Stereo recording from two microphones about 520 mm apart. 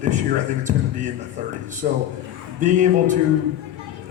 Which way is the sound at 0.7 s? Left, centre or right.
Centre.